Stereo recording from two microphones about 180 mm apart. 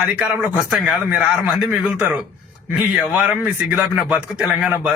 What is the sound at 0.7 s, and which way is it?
A man's voice, 5° right (ahead or behind).